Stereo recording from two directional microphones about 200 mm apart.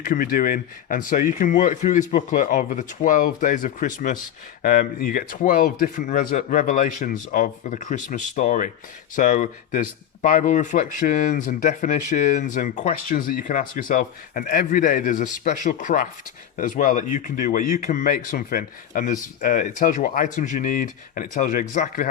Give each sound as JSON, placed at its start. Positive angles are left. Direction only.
{"t": 0.0, "sound": "speech", "side_deg": 45}